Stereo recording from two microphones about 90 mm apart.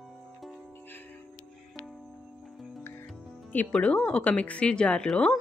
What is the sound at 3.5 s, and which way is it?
A woman's voice, 15° left (ahead or behind).